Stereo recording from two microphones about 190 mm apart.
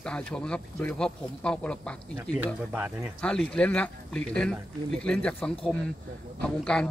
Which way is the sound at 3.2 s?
5° left (ahead or behind).